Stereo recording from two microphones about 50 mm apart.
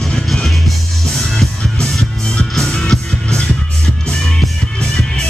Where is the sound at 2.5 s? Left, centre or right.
Centre.